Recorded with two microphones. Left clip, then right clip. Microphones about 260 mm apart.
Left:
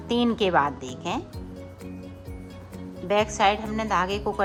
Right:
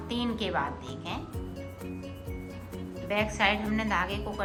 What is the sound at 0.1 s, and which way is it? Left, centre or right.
A woman's voice, left.